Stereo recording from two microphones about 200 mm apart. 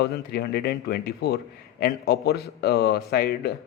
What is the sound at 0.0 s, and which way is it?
Speech, 55° left (ahead or behind).